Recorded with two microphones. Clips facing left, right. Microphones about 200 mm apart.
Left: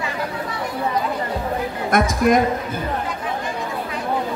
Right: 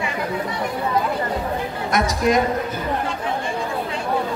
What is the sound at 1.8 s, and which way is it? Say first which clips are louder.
Speech: left 2 dB; 50° left (ahead or behind).